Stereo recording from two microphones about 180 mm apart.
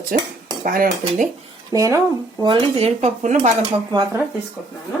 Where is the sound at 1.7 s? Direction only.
20° right (ahead or behind).